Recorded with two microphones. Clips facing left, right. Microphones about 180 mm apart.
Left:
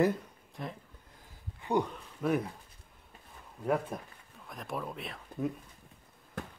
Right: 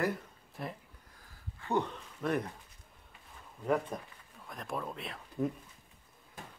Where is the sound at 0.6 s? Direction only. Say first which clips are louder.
Even; 5° right (ahead or behind).